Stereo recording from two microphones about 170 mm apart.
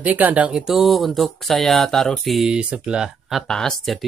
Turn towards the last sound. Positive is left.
turn(degrees=0)  # may be behind; listen again after turning